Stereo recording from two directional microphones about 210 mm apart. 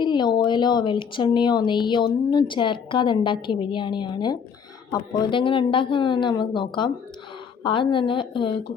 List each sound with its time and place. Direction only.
0.0 s a woman's voice: 20° left (ahead or behind)